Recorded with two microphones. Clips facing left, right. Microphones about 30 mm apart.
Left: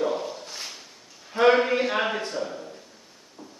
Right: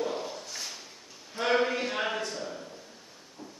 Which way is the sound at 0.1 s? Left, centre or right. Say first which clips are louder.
Left 5 dB; centre.